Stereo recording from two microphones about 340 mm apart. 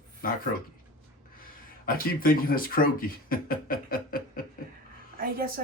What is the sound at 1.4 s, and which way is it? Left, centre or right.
Speech, left.